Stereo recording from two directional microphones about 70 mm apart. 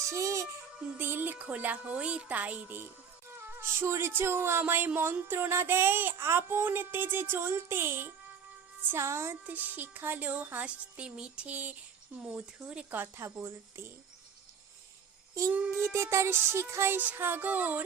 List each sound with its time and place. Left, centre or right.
0.0 s music: right
0.9 s speech: right
9.3 s speech: right
13.2 s speech: right
15.8 s speech: right
17.0 s speech: right